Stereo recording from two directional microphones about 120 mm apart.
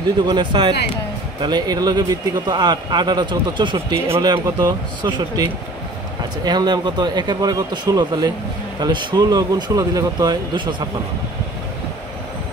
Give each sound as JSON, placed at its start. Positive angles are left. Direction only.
{"t": 0.3, "sound": "speech", "side_deg": -40}
{"t": 4.2, "sound": "speech", "side_deg": -30}